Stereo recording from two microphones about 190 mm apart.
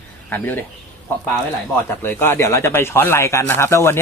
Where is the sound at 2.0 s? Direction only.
10° left (ahead or behind).